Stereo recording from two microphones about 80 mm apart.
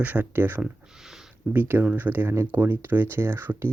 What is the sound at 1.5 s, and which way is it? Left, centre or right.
Speech, right.